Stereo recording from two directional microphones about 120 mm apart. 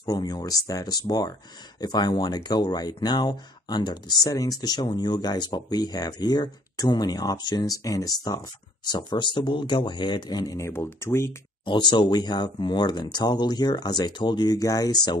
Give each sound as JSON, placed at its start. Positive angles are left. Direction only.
{"t": 0.0, "sound": "speech", "side_deg": 35}
{"t": 11.6, "sound": "speech", "side_deg": 40}